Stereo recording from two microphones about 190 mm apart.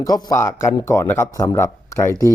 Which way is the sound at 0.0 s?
20° left (ahead or behind).